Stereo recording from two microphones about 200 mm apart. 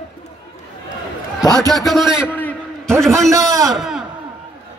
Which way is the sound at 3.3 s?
15° right (ahead or behind).